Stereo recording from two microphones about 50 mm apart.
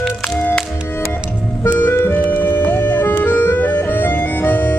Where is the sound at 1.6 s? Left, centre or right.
Left.